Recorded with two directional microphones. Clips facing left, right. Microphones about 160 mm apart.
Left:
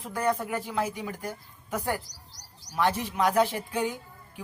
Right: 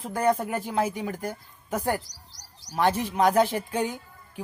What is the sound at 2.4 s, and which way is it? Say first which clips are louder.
Bird: right 2 dB; 65° right (ahead or behind).